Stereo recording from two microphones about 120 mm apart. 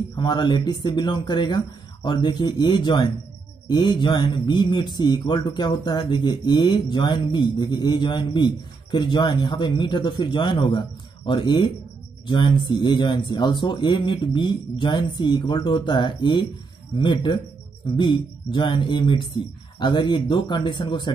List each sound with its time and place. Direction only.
0.1 s a man's voice: 35° left (ahead or behind)